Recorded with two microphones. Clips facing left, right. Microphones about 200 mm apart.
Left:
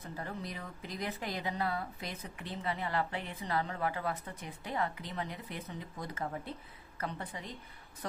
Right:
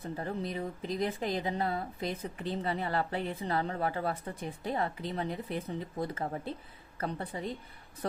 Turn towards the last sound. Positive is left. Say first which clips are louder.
# right 5 dB
turn(degrees=-35)  # may be behind; listen again after turning